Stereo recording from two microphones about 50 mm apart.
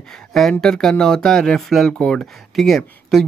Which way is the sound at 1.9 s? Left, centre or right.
Centre.